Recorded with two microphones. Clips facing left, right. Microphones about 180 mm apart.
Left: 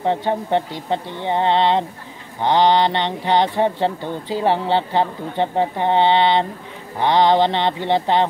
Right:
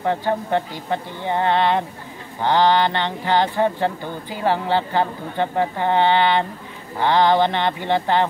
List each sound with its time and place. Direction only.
0.0 s speech: 20° left (ahead or behind)